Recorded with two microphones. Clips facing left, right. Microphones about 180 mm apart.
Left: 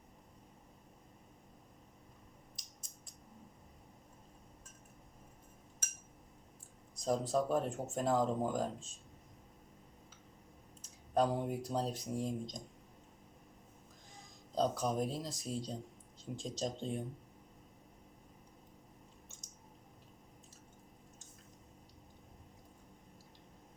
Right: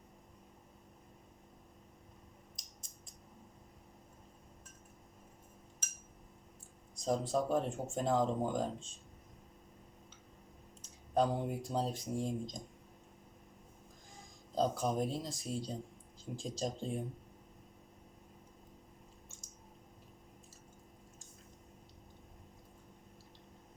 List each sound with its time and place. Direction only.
6.9 s speech: centre (ahead or behind)
10.8 s speech: centre (ahead or behind)
14.5 s speech: centre (ahead or behind)